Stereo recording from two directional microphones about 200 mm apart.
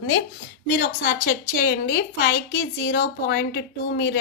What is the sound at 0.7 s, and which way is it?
A woman's voice, 50° left (ahead or behind).